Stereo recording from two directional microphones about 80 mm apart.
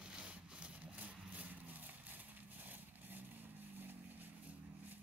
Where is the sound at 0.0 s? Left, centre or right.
Centre.